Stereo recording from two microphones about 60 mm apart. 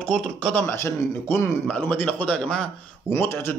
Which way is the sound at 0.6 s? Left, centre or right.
Left.